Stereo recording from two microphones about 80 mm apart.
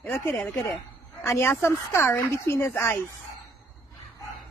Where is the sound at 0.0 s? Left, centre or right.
Left.